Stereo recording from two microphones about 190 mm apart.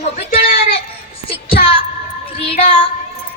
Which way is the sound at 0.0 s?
45° left (ahead or behind).